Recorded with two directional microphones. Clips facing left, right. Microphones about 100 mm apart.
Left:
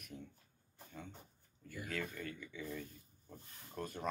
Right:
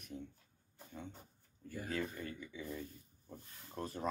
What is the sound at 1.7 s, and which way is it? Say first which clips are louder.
Speech: right 3 dB; 35° right (ahead or behind).